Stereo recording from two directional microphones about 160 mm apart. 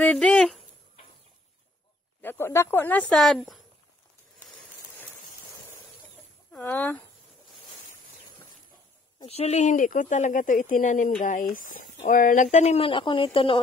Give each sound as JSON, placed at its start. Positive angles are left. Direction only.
{"t": 0.0, "sound": "speech", "side_deg": 10}
{"t": 2.2, "sound": "speech", "side_deg": 15}
{"t": 6.6, "sound": "speech", "side_deg": 10}
{"t": 9.2, "sound": "speech", "side_deg": 40}